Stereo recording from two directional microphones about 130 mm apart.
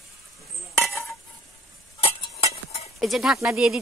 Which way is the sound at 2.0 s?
50° left (ahead or behind).